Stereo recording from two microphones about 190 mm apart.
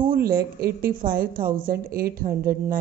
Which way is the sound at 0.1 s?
55° right (ahead or behind).